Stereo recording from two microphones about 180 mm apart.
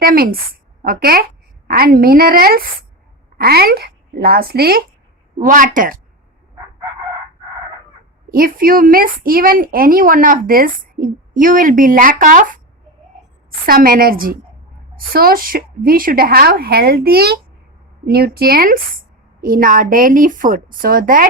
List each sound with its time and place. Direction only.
0.0 s a woman's voice: 55° right (ahead or behind)
5.4 s a woman's voice: 45° right (ahead or behind)
8.3 s a woman's voice: 55° right (ahead or behind)
13.7 s a woman's voice: 55° right (ahead or behind)